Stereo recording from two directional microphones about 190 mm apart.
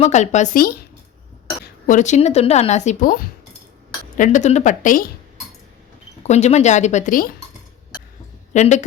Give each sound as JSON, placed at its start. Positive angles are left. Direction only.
{"t": 0.0, "sound": "speech", "side_deg": 35}
{"t": 1.9, "sound": "speech", "side_deg": 40}
{"t": 6.2, "sound": "speech", "side_deg": 35}
{"t": 8.5, "sound": "speech", "side_deg": 40}